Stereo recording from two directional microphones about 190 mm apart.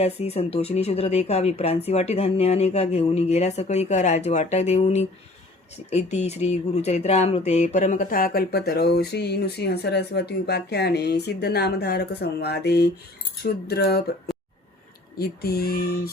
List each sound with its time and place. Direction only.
0.0 s a woman's voice: 35° left (ahead or behind); by 14.0 s 55° left (ahead or behind)
15.2 s female singing: 55° left (ahead or behind)